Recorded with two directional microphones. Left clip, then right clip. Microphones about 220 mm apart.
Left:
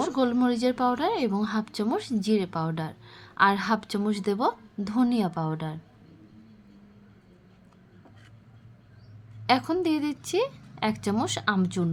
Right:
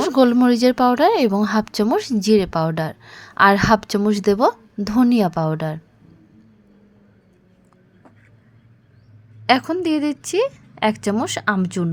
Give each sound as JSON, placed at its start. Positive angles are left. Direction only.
{"t": 0.0, "sound": "a woman's voice", "side_deg": -35}
{"t": 9.5, "sound": "a woman's voice", "side_deg": -20}